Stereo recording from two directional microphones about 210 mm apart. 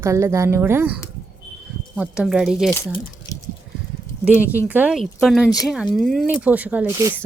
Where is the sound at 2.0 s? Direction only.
5° right (ahead or behind).